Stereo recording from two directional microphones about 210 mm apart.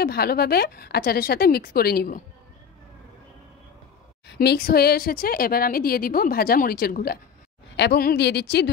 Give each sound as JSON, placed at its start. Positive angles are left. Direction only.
{"t": 0.0, "sound": "a woman's voice", "side_deg": 50}
{"t": 4.3, "sound": "a woman's voice", "side_deg": 50}